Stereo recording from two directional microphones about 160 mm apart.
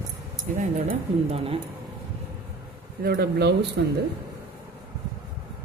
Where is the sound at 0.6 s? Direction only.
50° right (ahead or behind).